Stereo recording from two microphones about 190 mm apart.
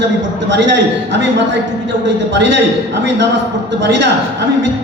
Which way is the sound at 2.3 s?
70° right (ahead or behind).